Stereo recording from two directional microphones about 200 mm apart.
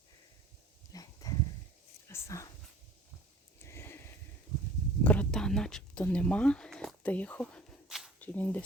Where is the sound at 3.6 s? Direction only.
10° left (ahead or behind).